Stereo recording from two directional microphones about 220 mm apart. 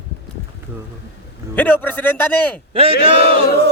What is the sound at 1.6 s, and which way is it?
A man's voice, 5° left (ahead or behind).